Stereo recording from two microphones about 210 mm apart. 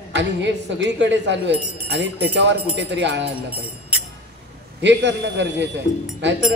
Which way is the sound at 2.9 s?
55° right (ahead or behind).